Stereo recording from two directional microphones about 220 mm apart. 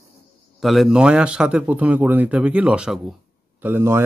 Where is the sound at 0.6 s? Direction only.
Centre (ahead or behind).